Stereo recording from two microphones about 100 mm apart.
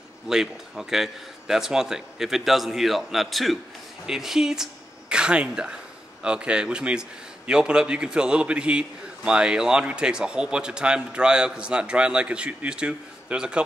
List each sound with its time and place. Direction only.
0.3 s a man's voice: 5° right (ahead or behind)